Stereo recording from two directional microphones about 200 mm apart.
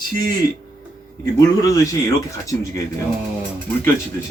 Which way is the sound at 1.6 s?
15° left (ahead or behind).